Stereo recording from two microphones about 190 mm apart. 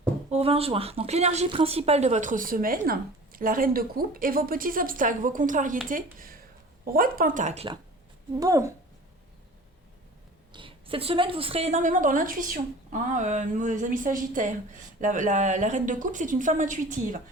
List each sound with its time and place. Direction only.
0.3 s speech: 30° right (ahead or behind)
8.4 s speech: 15° right (ahead or behind)
10.5 s a woman's voice: 25° right (ahead or behind); by 17.2 s 40° right (ahead or behind)